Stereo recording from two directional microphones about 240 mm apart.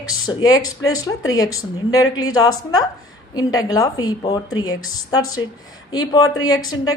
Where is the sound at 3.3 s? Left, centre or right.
Centre.